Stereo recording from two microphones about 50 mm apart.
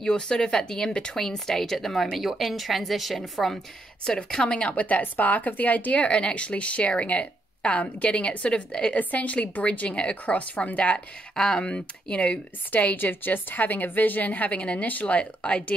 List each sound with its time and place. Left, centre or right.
0.0 s a woman's voice: centre
4.3 s speech: centre
12.7 s a woman's voice: left